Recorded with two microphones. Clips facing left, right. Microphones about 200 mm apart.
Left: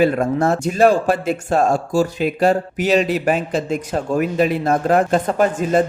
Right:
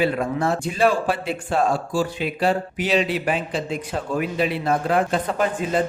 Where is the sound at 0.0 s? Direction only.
45° left (ahead or behind).